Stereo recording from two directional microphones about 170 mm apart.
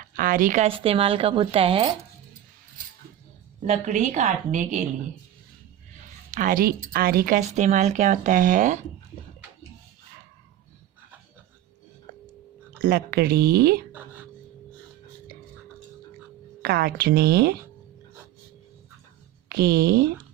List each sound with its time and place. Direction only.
0.0 s speech: 55° right (ahead or behind)
0.7 s speech: 30° right (ahead or behind)
3.7 s speech: 45° right (ahead or behind)
6.3 s speech: 55° right (ahead or behind)
12.8 s a woman's voice: 65° right (ahead or behind)
13.9 s a sound: 10° right (ahead or behind)
16.6 s a woman's voice: 65° right (ahead or behind)
19.5 s a woman's voice: 65° right (ahead or behind)